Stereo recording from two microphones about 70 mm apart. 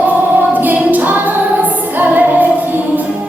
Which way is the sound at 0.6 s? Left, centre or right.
Right.